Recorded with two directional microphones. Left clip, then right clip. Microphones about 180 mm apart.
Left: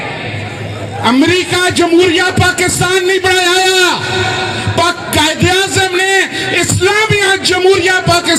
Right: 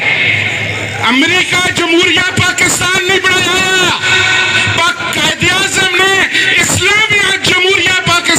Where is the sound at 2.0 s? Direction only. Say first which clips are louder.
Right 1 dB; 40° left (ahead or behind).